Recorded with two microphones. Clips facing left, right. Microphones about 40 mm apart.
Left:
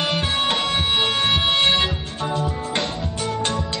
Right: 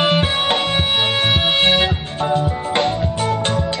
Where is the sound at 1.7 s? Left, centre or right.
Centre.